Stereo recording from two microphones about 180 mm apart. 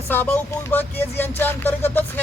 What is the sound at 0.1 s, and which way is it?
Speech, 10° left (ahead or behind).